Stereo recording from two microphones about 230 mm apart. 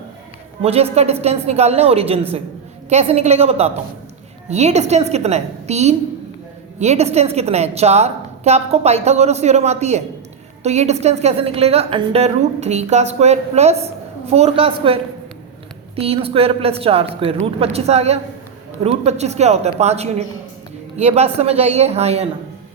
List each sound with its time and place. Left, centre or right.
0.6 s a woman's voice: right